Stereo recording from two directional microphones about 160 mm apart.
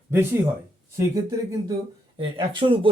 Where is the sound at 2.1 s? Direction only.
35° right (ahead or behind).